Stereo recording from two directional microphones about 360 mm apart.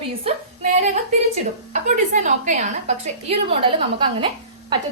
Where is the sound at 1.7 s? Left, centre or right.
Right.